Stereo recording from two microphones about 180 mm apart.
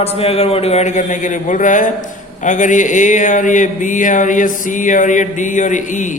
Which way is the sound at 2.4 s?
45° left (ahead or behind).